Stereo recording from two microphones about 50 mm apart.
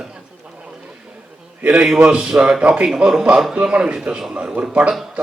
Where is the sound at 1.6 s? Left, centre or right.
Right.